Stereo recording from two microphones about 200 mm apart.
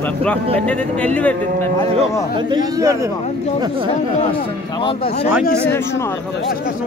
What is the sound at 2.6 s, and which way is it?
Speech, 15° right (ahead or behind).